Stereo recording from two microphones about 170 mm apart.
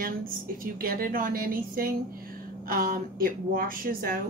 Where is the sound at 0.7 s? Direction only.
60° right (ahead or behind).